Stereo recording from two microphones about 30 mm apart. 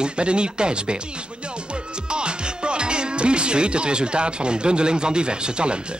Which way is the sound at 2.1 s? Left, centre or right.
Right.